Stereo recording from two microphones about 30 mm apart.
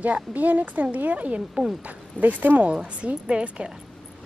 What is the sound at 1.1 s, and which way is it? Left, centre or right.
Speech, right.